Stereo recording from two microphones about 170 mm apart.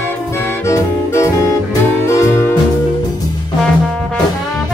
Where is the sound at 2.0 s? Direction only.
15° left (ahead or behind).